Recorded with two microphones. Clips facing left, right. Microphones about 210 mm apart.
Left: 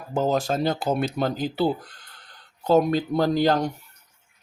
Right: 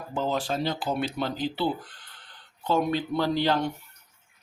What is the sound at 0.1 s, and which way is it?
Speech, 45° left (ahead or behind).